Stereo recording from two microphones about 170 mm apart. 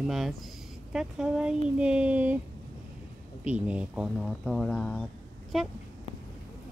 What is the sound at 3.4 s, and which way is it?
Speech, 5° right (ahead or behind).